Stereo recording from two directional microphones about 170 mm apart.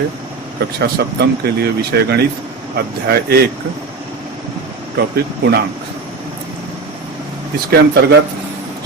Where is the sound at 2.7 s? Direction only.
65° right (ahead or behind).